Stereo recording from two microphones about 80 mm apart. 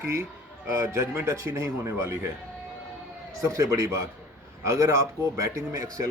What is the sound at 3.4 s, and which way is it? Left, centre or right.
A man's voice, right.